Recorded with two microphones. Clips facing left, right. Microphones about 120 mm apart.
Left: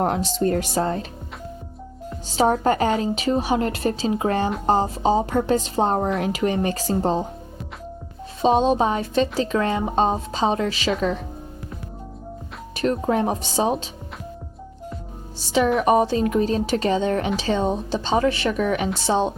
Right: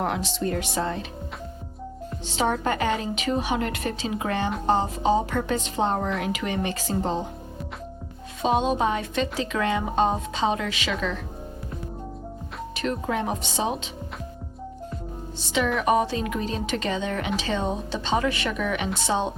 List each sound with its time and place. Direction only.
0.0 s speech: 40° left (ahead or behind)
2.2 s speech: 40° left (ahead or behind)
8.4 s speech: 35° left (ahead or behind)
12.7 s speech: 40° left (ahead or behind)
15.4 s speech: 35° left (ahead or behind)
19.1 s a woman's voice: 20° left (ahead or behind)